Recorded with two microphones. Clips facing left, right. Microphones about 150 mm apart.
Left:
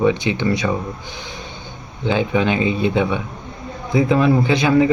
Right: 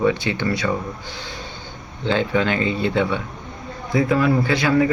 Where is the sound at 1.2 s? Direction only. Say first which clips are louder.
Left 1 dB; 15° left (ahead or behind).